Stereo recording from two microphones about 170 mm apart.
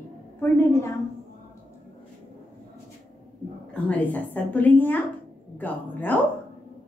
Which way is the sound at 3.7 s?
10° left (ahead or behind).